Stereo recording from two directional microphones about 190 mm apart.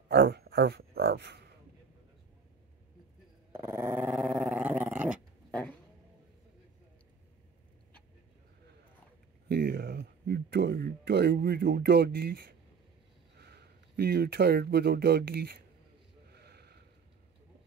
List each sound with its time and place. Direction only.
0.1 s a sound: 55° right (ahead or behind)
3.5 s dog: 15° right (ahead or behind)
9.5 s speech: 55° right (ahead or behind)
16.3 s sniff: 60° right (ahead or behind)